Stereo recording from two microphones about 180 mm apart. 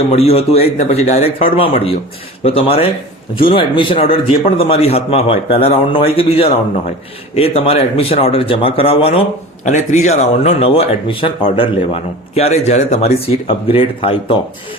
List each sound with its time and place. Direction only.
0.1 s speech: 35° left (ahead or behind)